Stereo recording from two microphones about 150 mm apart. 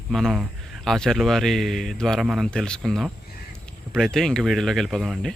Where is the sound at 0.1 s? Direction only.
Centre (ahead or behind).